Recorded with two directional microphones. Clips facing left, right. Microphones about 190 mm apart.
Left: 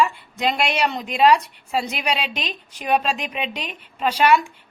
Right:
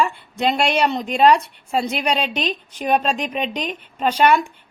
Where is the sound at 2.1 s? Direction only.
35° right (ahead or behind).